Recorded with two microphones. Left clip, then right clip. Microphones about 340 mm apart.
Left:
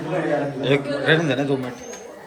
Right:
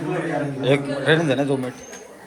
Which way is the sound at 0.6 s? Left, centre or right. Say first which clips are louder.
Right 4 dB; centre.